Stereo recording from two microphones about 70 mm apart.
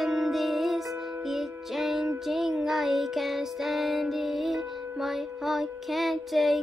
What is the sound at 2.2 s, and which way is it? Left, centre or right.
Music, centre.